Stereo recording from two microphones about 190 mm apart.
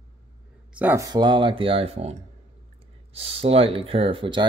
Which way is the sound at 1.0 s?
25° right (ahead or behind).